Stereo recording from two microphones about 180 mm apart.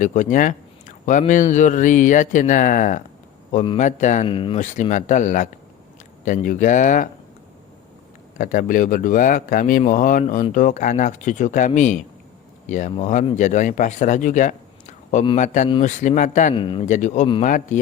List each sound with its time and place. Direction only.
0.0 s speech: 45° left (ahead or behind)
4.3 s speech: 30° left (ahead or behind)
4.6 s speech: 45° left (ahead or behind)
8.4 s a man's voice: 45° left (ahead or behind)
16.6 s speech: 30° left (ahead or behind)
16.9 s speech: 40° left (ahead or behind)